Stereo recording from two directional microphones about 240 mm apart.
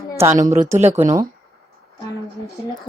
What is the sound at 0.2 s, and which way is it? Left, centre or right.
Speech, centre.